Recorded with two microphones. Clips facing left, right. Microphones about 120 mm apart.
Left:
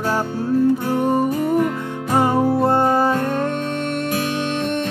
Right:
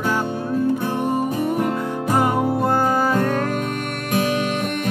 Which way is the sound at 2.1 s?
25° left (ahead or behind).